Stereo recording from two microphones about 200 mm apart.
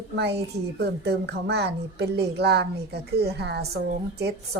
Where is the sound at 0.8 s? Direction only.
55° right (ahead or behind).